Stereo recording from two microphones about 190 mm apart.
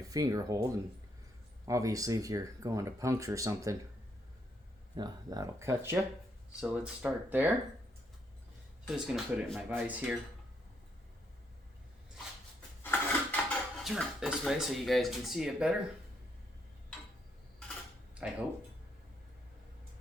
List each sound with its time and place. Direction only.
0.0 s speech: 20° right (ahead or behind)
4.9 s speech: 20° right (ahead or behind)
8.9 s speech: centre (ahead or behind)
12.8 s dishes: 10° left (ahead or behind)
13.8 s speech: centre (ahead or behind)
18.2 s speech: 5° right (ahead or behind)